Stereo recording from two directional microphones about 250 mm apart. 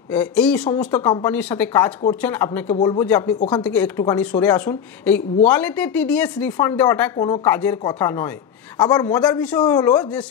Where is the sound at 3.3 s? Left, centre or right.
Left.